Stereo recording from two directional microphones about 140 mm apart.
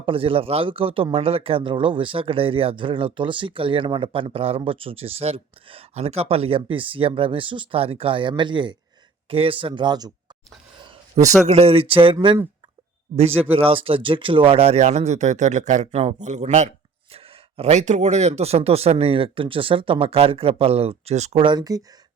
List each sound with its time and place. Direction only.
0.0 s speech: 40° right (ahead or behind)
11.4 s speech: 45° right (ahead or behind)
17.1 s speech: 45° right (ahead or behind)
21.4 s speech: 30° right (ahead or behind)